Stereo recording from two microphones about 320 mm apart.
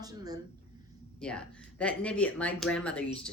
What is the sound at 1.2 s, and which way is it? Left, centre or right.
Speech, centre.